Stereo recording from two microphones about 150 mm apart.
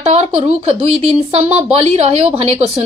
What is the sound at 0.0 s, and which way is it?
A woman's voice, 45° right (ahead or behind).